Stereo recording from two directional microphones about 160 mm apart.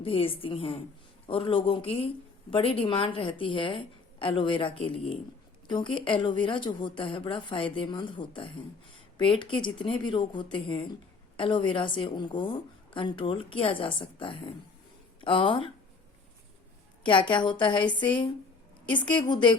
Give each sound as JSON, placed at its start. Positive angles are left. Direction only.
{"t": 0.0, "sound": "a woman's voice", "side_deg": 35}
{"t": 17.0, "sound": "a woman's voice", "side_deg": 30}